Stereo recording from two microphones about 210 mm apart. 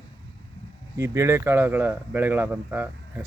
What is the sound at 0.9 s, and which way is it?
Speech, 15° right (ahead or behind).